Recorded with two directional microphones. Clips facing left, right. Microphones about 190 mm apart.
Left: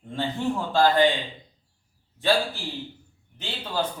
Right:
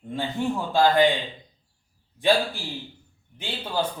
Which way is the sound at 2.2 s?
15° right (ahead or behind).